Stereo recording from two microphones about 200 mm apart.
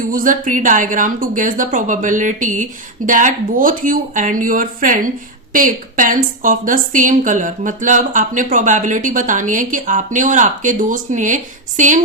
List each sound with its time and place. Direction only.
0.1 s a woman's voice: 45° right (ahead or behind)